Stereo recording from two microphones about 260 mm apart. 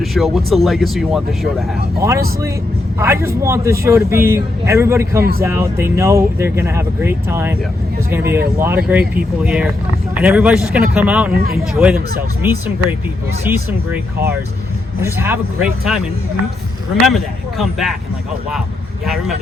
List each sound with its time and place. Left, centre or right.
0.0 s speech: centre
2.0 s a man's voice: centre
17.1 s speech: centre